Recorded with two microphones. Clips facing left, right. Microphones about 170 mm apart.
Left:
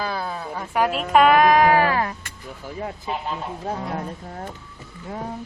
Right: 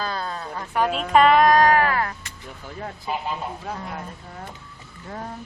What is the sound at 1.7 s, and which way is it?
Cat, 20° left (ahead or behind).